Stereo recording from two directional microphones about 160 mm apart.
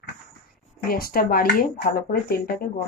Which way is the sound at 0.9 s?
70° left (ahead or behind).